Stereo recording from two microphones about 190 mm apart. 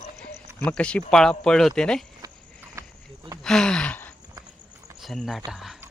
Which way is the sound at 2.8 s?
15° right (ahead or behind).